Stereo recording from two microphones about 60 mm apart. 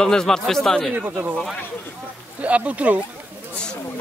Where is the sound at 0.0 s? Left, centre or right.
Centre.